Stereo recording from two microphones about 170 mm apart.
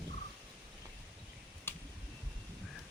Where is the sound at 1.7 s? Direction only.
15° left (ahead or behind).